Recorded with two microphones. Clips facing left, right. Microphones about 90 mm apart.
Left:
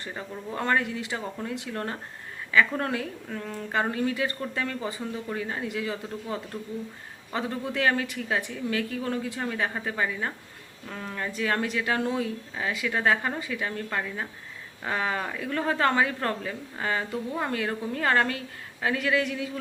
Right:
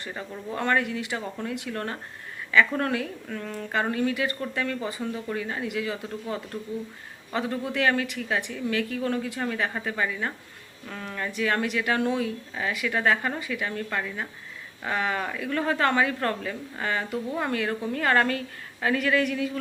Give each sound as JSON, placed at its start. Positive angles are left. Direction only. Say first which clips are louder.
{"t": 0.2, "sound": "a woman's voice", "louder": "right 1 dB", "side_deg": 25}
{"t": 7.3, "sound": "a woman's voice", "louder": "right 2 dB", "side_deg": 30}